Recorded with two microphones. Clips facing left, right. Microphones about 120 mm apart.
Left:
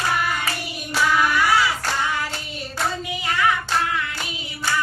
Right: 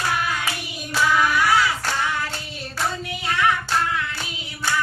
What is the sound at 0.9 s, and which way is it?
Child singing, 10° left (ahead or behind).